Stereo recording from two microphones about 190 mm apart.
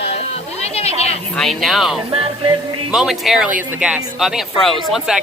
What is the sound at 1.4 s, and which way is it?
A woman's voice, centre (ahead or behind).